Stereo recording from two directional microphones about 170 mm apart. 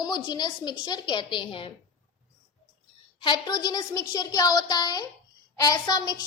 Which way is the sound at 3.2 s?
25° left (ahead or behind).